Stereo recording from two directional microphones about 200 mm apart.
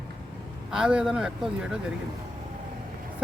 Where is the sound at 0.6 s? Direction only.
5° right (ahead or behind).